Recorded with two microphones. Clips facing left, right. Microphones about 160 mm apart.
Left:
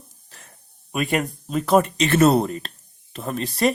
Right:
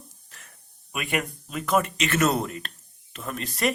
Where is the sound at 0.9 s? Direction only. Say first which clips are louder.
Left 6 dB; 35° left (ahead or behind).